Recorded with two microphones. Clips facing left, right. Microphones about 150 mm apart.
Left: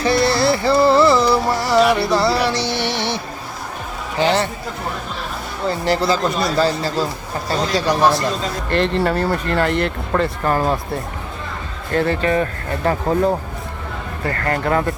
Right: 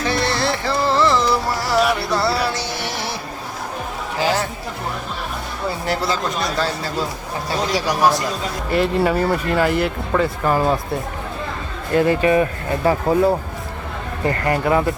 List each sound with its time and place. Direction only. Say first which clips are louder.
0.0 s music: left 4 dB; 5° left (ahead or behind)
4.2 s chatter: left 3 dB; 5° right (ahead or behind)
5.6 s speech: left 4 dB; centre (ahead or behind)
8.7 s speech: right 1 dB; 5° right (ahead or behind)
11.9 s speech: right 2 dB; 15° right (ahead or behind)